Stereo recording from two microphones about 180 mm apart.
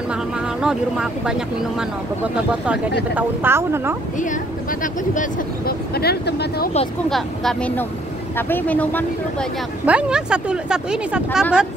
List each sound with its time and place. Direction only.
0.1 s speech: 5° right (ahead or behind)
3.2 s speech: 15° right (ahead or behind)
4.2 s speech: 45° left (ahead or behind); by 6.7 s 70° left (ahead or behind)
7.1 s speech: centre (ahead or behind)
9.8 s speech: 5° right (ahead or behind)